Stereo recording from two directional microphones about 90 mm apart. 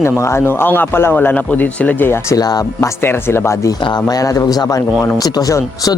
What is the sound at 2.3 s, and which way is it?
Speech, 40° left (ahead or behind).